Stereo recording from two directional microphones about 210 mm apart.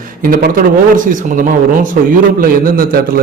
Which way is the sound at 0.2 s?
45° right (ahead or behind).